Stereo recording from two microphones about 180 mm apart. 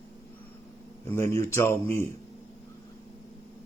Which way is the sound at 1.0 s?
15° left (ahead or behind).